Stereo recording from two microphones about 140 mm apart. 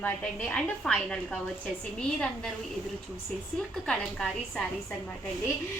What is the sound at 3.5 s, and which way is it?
A woman's voice, 5° left (ahead or behind).